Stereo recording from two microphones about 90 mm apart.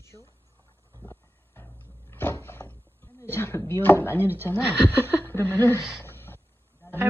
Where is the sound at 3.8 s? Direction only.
20° left (ahead or behind).